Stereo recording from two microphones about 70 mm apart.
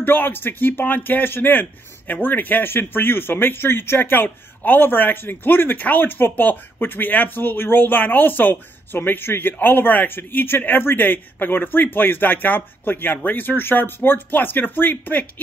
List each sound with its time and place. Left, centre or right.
0.0 s speech: left